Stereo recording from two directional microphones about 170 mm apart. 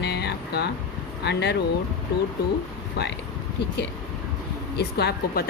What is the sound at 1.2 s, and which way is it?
Speech, 85° left.